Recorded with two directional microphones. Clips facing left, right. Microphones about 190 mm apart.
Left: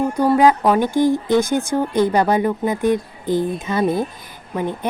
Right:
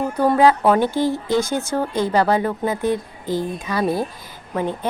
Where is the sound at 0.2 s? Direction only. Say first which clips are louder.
Even; 15° left (ahead or behind).